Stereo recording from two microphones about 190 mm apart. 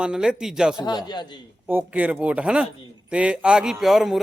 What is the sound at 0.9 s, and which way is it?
Speech, 20° left (ahead or behind).